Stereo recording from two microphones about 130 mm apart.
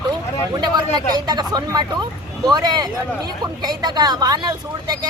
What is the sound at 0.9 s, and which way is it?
Speech, 30° right (ahead or behind).